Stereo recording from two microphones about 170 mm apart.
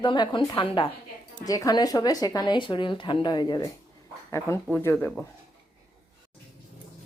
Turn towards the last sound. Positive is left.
turn(degrees=10)  # may be behind; listen again after turning